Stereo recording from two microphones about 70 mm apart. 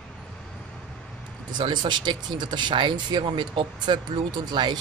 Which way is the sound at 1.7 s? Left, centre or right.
Right.